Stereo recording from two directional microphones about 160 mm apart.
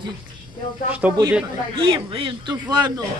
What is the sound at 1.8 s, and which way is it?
A woman's voice, 35° right (ahead or behind).